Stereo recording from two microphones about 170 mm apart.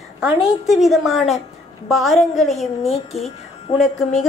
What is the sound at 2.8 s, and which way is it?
Speech, 40° left (ahead or behind).